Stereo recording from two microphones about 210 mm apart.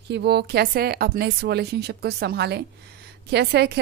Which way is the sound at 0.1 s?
50° right (ahead or behind).